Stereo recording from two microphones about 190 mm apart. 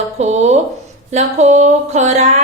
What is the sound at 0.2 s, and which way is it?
Speech, 35° right (ahead or behind).